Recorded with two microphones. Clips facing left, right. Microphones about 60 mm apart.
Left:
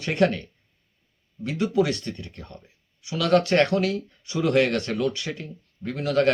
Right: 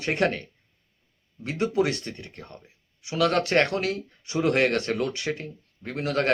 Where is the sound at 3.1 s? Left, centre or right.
Right.